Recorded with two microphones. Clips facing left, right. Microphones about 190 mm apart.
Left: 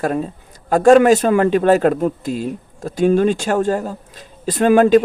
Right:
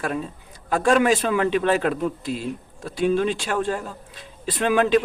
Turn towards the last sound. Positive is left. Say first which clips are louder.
# left 8 dB
turn(degrees=45)  # may be behind; listen again after turning